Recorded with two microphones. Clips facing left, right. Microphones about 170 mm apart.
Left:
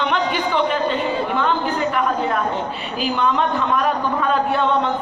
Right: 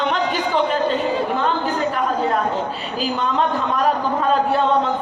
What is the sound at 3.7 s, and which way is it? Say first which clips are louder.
Speech: right 1 dB; 35° right (ahead or behind).